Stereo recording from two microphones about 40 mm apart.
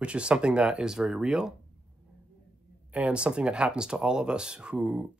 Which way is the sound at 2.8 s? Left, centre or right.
Right.